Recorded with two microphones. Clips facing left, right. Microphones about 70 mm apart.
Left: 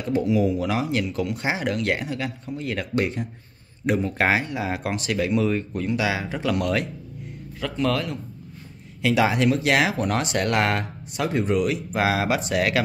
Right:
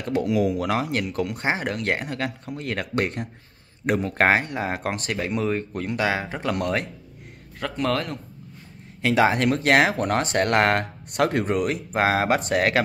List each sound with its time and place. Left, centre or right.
0.0 s speech: right